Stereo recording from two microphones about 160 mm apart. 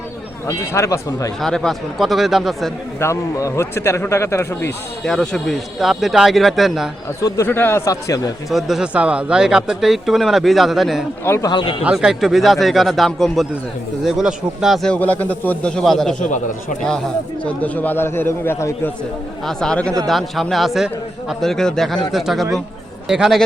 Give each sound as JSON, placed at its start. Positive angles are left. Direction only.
{"t": 0.4, "sound": "speech", "side_deg": 20}
{"t": 1.4, "sound": "speech", "side_deg": 5}
{"t": 3.0, "sound": "speech", "side_deg": 20}
{"t": 5.0, "sound": "speech", "side_deg": 5}
{"t": 7.2, "sound": "speech", "side_deg": 20}
{"t": 8.4, "sound": "speech", "side_deg": 0}
{"t": 11.3, "sound": "speech", "side_deg": 20}
{"t": 11.5, "sound": "speech", "side_deg": 35}
{"t": 11.8, "sound": "speech", "side_deg": -5}
{"t": 16.2, "sound": "speech", "side_deg": 50}
{"t": 17.4, "sound": "speech", "side_deg": 10}
{"t": 19.5, "sound": "speech", "side_deg": 5}